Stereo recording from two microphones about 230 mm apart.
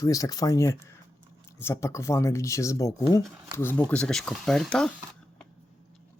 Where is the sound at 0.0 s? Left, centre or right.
Centre.